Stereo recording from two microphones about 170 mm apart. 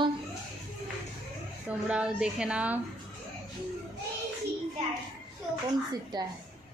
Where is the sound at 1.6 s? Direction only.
5° right (ahead or behind).